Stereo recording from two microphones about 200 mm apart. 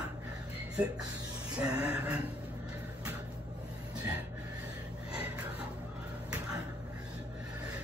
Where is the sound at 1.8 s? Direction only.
5° right (ahead or behind).